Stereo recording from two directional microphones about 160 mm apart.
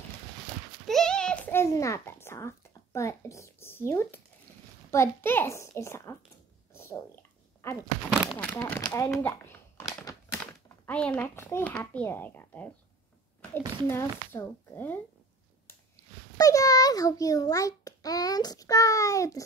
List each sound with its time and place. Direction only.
0.8 s a sound: 5° left (ahead or behind)
4.9 s a child's voice: 15° left (ahead or behind)
6.7 s cat: 15° left (ahead or behind)
7.6 s a child's voice: 15° left (ahead or behind)
8.1 s speech: 5° right (ahead or behind)
8.4 s a child's voice: 15° left (ahead or behind)
13.8 s a child's voice: 15° left (ahead or behind)
16.3 s a child's voice: 20° left (ahead or behind)